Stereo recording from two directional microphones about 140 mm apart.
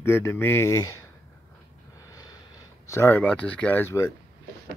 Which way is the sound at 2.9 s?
15° left (ahead or behind).